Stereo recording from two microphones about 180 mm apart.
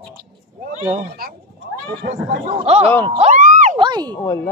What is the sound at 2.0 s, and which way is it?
Speech, 40° right (ahead or behind).